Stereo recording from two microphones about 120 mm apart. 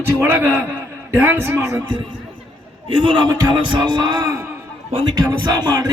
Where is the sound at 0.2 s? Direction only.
15° right (ahead or behind).